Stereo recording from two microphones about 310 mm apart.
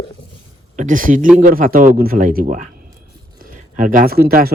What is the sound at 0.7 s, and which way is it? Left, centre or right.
Speech, right.